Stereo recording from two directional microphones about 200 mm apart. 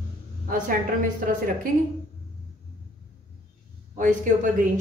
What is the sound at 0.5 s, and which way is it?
A woman's voice, 45° right (ahead or behind).